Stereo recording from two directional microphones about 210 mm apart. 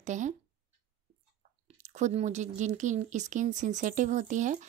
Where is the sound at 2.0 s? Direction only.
35° right (ahead or behind).